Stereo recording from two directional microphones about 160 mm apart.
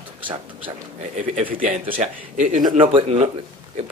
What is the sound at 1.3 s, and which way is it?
A man's voice, 60° right (ahead or behind).